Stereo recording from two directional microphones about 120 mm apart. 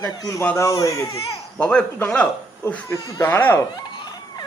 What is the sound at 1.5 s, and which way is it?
Speech, 10° left (ahead or behind).